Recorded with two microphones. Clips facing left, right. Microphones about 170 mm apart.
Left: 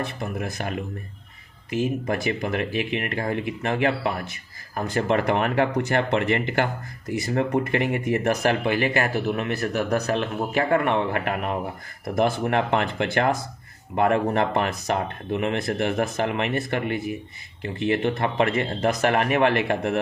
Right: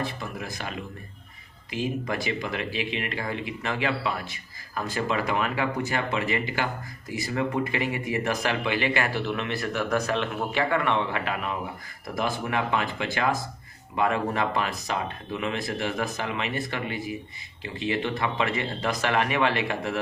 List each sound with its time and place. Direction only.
0.0 s speech: 55° left (ahead or behind)
7.1 s speech: 50° left (ahead or behind)